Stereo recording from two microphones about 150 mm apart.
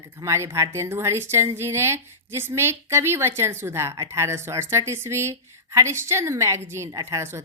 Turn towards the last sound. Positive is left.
turn(degrees=-15)  # may be behind; listen again after turning